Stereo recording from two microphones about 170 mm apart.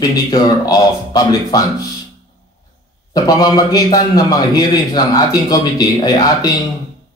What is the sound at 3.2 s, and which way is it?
A man's voice, 20° left (ahead or behind).